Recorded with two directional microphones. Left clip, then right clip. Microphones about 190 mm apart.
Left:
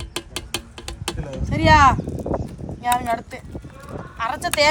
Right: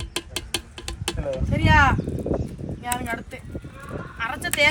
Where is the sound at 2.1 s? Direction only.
Centre (ahead or behind).